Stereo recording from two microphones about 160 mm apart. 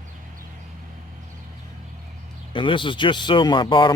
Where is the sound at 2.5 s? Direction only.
30° left (ahead or behind).